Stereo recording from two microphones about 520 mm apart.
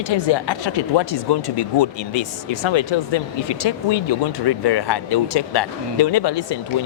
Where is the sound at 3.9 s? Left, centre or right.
Left.